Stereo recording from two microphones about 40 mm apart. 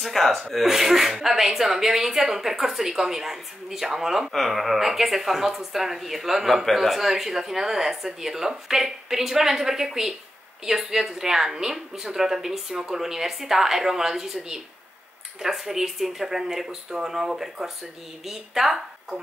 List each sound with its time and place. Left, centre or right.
0.0 s speech: centre